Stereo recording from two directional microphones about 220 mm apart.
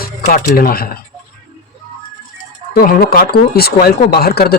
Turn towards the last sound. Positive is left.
turn(degrees=45)  # may be behind; listen again after turning